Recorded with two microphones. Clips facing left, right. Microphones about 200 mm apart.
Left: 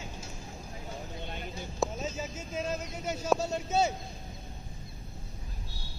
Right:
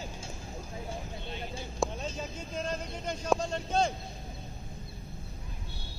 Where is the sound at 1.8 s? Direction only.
Centre (ahead or behind).